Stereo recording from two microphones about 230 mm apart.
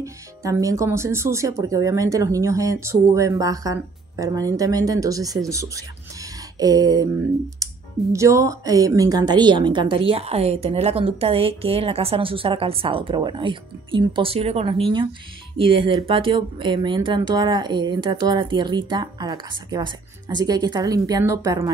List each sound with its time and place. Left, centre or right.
0.0 s speech: centre